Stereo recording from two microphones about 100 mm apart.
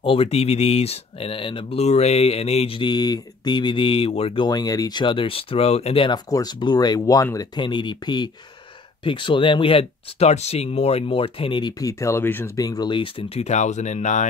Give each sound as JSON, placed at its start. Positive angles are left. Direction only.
{"t": 0.0, "sound": "speech", "side_deg": 75}
{"t": 2.8, "sound": "speech", "side_deg": 45}
{"t": 4.5, "sound": "speech", "side_deg": 40}
{"t": 6.3, "sound": "speech", "side_deg": 45}
{"t": 7.3, "sound": "speech", "side_deg": 50}
{"t": 11.8, "sound": "speech", "side_deg": 30}
{"t": 12.5, "sound": "speech", "side_deg": 40}
{"t": 12.9, "sound": "speech", "side_deg": 70}